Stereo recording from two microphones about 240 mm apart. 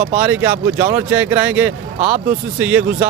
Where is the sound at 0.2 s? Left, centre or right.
Centre.